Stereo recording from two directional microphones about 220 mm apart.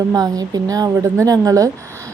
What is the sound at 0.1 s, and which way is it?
A woman's voice, 15° right (ahead or behind).